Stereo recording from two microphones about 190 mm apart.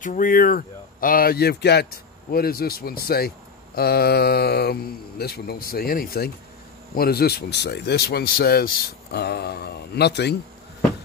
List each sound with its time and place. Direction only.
0.0 s speech: 45° left (ahead or behind); by 10.3 s 60° left (ahead or behind)